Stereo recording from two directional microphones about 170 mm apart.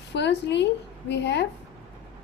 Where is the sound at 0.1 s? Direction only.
90° left.